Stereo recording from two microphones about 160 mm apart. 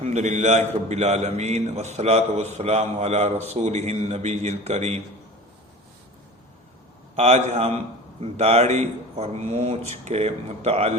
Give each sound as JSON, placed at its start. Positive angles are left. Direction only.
{"t": 0.0, "sound": "a man's voice", "side_deg": -45}
{"t": 7.2, "sound": "a man's voice", "side_deg": -45}